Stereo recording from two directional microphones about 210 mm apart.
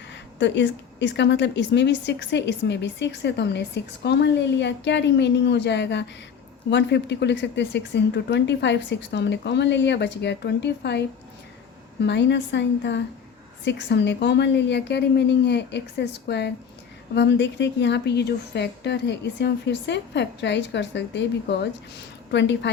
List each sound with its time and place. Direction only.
0.1 s a woman's voice: 60° left (ahead or behind)